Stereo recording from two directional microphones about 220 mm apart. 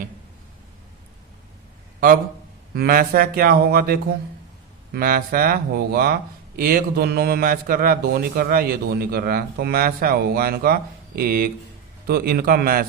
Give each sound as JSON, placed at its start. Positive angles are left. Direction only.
{"t": 2.7, "sound": "a man's voice", "side_deg": -40}